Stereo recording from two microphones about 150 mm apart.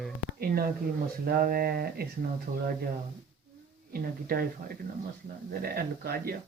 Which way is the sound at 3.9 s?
80° right.